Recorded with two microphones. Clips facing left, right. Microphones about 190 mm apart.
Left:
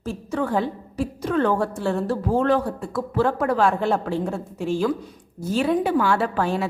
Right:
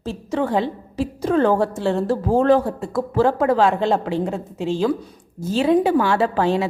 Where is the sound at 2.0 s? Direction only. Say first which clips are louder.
Right 4 dB; 40° right (ahead or behind).